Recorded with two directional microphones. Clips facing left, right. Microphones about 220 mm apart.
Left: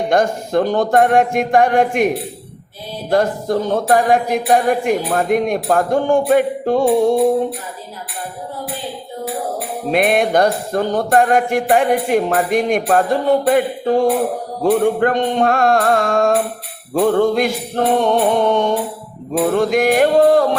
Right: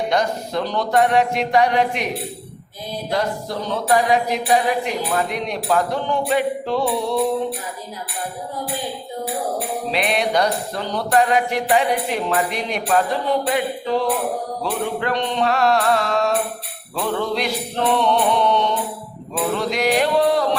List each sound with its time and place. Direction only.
0.1 s music: 50° left (ahead or behind)
9.9 s music: 50° left (ahead or behind)